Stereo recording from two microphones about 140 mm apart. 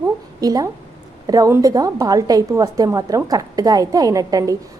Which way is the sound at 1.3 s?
20° right (ahead or behind).